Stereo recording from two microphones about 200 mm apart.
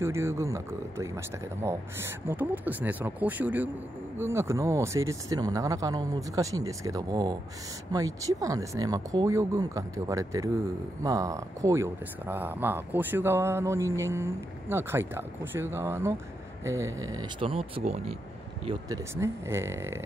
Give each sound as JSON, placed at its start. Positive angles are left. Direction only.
{"t": 0.0, "sound": "speech", "side_deg": -10}
{"t": 18.7, "sound": "speech", "side_deg": -15}